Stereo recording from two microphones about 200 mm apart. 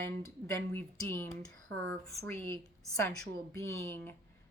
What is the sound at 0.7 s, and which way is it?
Speech, 10° left (ahead or behind).